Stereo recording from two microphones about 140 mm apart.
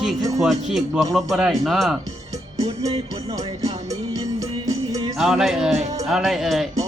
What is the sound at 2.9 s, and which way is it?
Music, 45° right (ahead or behind).